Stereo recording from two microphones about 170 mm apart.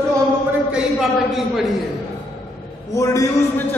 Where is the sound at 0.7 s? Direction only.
5° right (ahead or behind).